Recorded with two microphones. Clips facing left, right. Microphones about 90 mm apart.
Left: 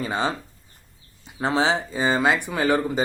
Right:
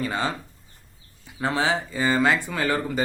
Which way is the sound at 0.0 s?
25° left (ahead or behind).